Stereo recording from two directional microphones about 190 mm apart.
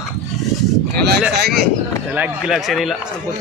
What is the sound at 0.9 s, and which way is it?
Speech, 55° right (ahead or behind).